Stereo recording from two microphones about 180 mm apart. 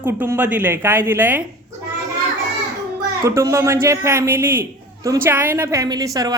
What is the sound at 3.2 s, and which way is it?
A woman's voice, 15° right (ahead or behind).